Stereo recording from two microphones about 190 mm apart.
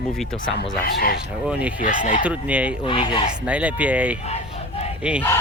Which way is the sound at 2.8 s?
25° left (ahead or behind).